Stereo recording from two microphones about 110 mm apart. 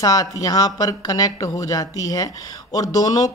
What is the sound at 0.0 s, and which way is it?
Speech, 35° left (ahead or behind).